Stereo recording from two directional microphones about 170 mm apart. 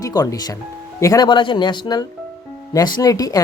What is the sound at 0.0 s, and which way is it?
Speech, 20° left (ahead or behind).